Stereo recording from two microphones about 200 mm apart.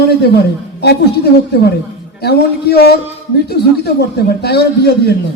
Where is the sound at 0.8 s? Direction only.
55° left (ahead or behind).